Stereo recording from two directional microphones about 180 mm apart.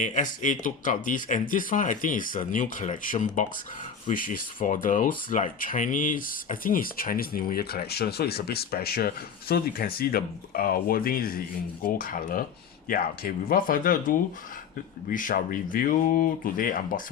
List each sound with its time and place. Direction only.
0.0 s speech: 45° left (ahead or behind)